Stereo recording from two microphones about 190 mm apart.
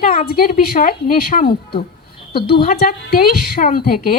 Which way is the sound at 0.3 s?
50° left (ahead or behind).